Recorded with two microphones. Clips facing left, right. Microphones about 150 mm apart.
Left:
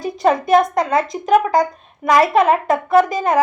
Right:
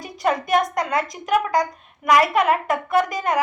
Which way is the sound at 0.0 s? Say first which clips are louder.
Left 6 dB; 25° left (ahead or behind).